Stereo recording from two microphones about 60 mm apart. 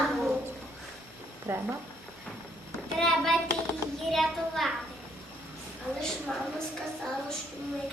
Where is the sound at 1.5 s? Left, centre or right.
Right.